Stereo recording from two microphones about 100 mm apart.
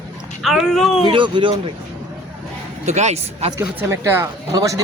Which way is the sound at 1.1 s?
55° right (ahead or behind).